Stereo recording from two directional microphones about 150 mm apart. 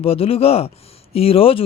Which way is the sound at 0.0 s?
40° left (ahead or behind).